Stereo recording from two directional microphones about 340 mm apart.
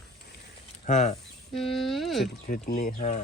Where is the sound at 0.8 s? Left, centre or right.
Centre.